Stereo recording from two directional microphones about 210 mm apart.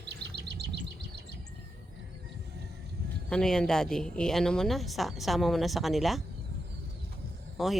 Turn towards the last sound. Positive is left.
turn(degrees=0)  # may be behind; listen again after turning